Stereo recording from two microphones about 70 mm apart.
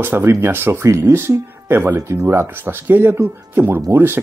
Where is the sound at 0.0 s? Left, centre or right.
Right.